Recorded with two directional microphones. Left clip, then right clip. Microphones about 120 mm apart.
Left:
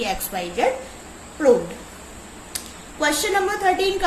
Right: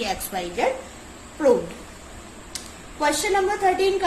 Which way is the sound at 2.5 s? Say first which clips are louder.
Left 2 dB; 35° left (ahead or behind).